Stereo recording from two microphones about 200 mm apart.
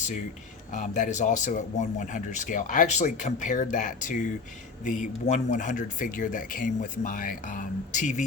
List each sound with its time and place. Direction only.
0.7 s speech: 35° left (ahead or behind)